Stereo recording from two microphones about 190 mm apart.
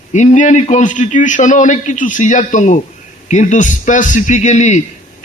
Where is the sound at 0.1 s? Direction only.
40° left (ahead or behind).